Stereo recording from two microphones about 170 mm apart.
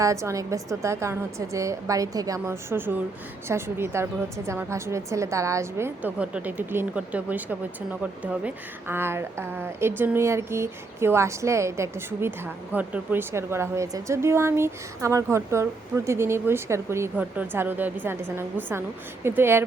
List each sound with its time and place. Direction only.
0.0 s a woman's voice: 15° right (ahead or behind)